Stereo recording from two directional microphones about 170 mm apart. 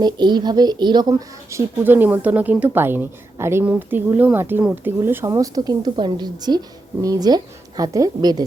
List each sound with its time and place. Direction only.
0.0 s a woman's voice: 25° right (ahead or behind)